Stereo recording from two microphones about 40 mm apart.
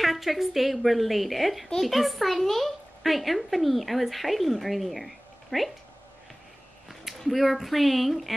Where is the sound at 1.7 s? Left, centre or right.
Centre.